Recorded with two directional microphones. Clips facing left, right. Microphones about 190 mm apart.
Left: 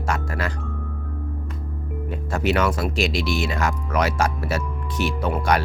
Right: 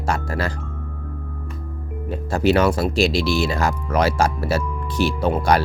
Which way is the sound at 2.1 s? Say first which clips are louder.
Right 5 dB; 35° right (ahead or behind).